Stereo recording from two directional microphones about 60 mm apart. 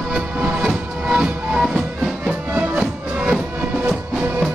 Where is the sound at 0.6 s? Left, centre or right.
Centre.